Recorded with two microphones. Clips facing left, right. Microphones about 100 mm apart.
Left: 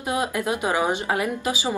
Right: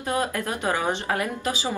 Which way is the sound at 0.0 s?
15° left (ahead or behind).